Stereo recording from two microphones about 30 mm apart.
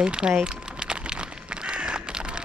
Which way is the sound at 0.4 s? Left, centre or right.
Right.